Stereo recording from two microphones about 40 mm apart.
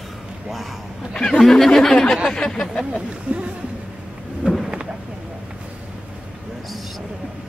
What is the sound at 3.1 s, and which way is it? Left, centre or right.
Speech, right.